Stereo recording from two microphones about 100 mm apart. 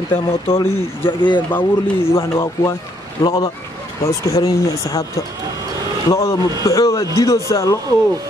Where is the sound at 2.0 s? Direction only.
25° left (ahead or behind).